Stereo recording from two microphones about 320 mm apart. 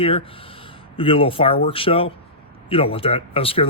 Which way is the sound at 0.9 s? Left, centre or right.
Centre.